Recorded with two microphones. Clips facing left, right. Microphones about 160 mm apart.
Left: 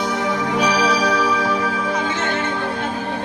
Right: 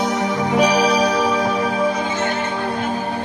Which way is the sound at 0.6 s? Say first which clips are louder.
Right 3 dB; 45° right (ahead or behind).